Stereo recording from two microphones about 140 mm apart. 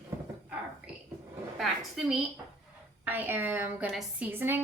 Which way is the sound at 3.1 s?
15° right (ahead or behind).